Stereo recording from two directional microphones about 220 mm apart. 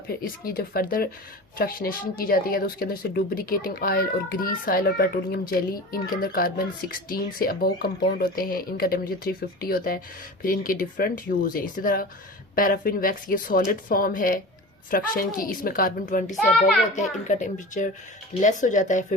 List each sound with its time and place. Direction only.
0.2 s speech: 40° left (ahead or behind)